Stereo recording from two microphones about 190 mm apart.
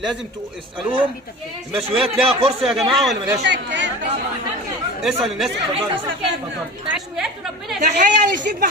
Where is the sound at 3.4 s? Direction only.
65° right (ahead or behind).